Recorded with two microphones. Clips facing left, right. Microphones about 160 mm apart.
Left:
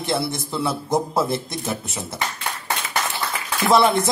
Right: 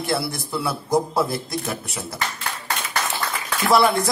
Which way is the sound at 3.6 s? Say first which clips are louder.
Left 1 dB; 20° left (ahead or behind).